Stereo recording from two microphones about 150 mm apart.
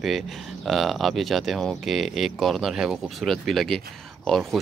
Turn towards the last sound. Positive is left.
turn(degrees=0)  # may be behind; listen again after turning